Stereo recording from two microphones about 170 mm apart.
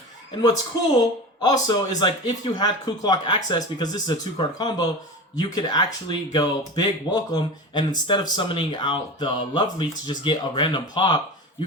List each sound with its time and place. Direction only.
1.4 s speech: 25° left (ahead or behind)